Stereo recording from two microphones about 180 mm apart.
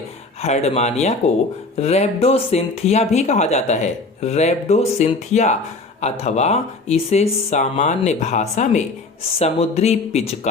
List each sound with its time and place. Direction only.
0.4 s speech: 35° left (ahead or behind)